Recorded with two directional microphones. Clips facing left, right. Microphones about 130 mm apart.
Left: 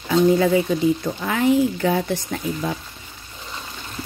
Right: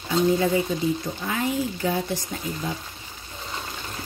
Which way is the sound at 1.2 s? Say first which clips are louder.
Left 9 dB; 85° left.